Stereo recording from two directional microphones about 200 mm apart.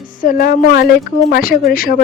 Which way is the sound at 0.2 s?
45° left (ahead or behind).